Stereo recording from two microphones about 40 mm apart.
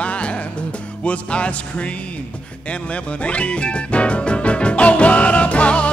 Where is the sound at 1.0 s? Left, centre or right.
Left.